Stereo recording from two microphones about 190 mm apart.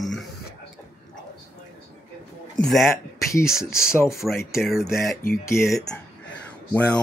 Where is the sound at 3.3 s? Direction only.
15° left (ahead or behind).